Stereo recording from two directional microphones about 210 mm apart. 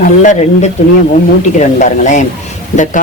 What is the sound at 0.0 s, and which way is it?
Speech, 35° left (ahead or behind).